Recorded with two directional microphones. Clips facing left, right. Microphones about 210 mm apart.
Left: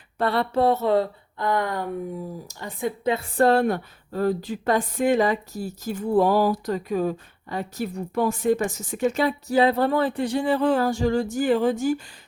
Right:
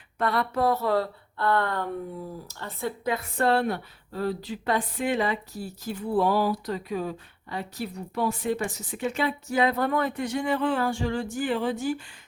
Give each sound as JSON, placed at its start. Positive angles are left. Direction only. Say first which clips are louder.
{"t": 0.2, "sound": "speech", "louder": "left 4 dB", "side_deg": 30}
{"t": 3.0, "sound": "speech", "louder": "left 6 dB", "side_deg": 25}
{"t": 3.4, "sound": "speech", "louder": "left 5 dB", "side_deg": 45}